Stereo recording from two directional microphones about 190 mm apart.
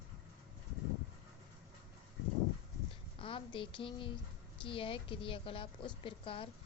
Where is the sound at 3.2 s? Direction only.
25° left (ahead or behind).